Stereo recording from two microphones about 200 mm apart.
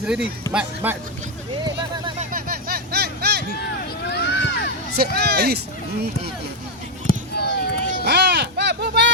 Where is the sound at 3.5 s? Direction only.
55° left (ahead or behind).